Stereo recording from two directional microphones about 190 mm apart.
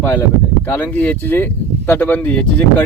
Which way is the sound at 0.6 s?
10° left (ahead or behind).